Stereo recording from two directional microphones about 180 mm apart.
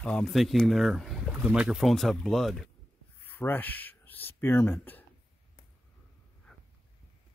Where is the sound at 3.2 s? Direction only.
10° left (ahead or behind).